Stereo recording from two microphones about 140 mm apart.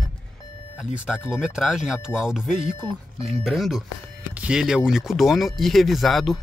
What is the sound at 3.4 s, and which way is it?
Speech, centre (ahead or behind).